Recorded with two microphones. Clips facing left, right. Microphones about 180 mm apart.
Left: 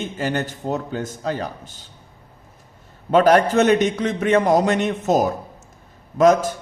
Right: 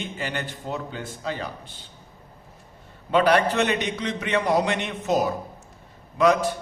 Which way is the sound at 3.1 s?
45° left (ahead or behind).